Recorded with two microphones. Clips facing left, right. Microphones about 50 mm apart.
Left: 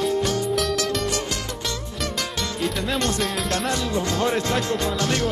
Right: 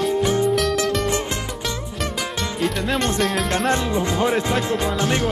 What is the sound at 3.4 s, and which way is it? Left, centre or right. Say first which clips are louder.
Speech: right 4 dB; right.